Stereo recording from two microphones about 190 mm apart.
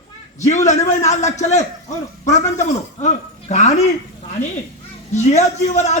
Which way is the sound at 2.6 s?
35° left (ahead or behind).